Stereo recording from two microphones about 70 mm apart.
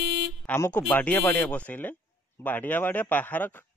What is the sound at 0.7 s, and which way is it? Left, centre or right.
Speech, left.